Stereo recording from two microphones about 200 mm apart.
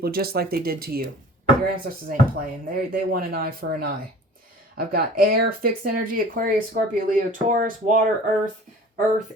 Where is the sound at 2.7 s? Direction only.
45° right (ahead or behind).